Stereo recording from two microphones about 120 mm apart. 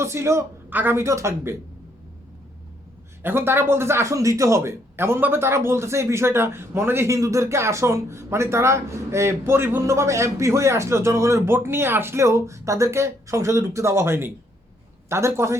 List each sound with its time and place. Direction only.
0.0 s speech: 20° right (ahead or behind)
3.2 s speech: 20° right (ahead or behind)